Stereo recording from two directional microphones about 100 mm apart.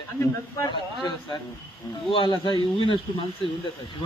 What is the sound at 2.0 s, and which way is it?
Speech, 55° left (ahead or behind).